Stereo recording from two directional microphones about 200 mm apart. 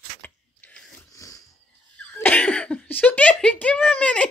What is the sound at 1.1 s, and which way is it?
Dog, 15° left (ahead or behind).